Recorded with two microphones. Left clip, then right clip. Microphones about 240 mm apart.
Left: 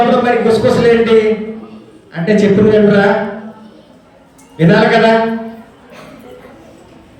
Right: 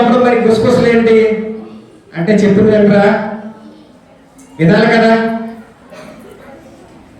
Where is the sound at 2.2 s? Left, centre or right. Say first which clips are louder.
Even; centre.